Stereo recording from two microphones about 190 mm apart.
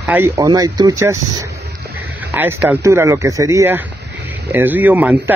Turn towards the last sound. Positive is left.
turn(degrees=-10)  # may be behind; listen again after turning